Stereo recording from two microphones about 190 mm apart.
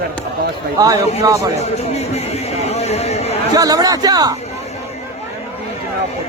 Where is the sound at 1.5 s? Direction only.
35° left (ahead or behind).